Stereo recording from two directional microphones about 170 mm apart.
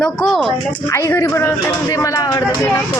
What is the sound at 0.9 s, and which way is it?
Speech, 15° left (ahead or behind).